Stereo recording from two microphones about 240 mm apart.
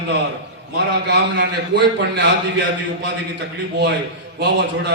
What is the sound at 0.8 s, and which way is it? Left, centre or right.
A man's voice, right.